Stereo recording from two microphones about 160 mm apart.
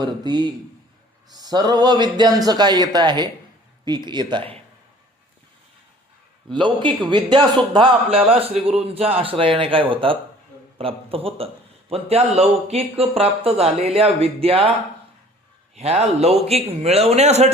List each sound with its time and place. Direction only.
0.0 s speech: 25° right (ahead or behind)
6.5 s speech: 30° right (ahead or behind)
15.7 s speech: 40° right (ahead or behind)